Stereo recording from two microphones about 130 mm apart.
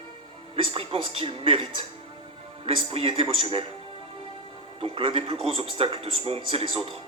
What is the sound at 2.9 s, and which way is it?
Speech, 45° right (ahead or behind).